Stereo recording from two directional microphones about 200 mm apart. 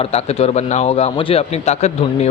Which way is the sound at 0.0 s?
30° left (ahead or behind).